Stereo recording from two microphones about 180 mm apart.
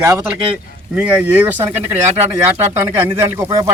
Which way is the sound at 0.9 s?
10° right (ahead or behind).